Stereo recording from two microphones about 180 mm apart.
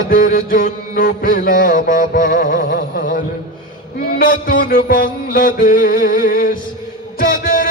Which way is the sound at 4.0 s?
55° left (ahead or behind).